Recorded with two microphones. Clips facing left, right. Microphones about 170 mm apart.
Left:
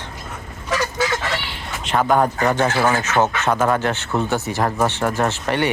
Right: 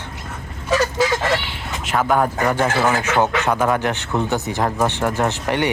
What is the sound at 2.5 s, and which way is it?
Speech, 10° right (ahead or behind).